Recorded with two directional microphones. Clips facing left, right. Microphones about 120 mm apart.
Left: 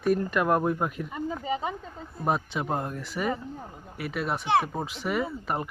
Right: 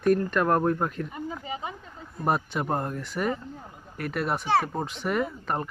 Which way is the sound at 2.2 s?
Centre (ahead or behind).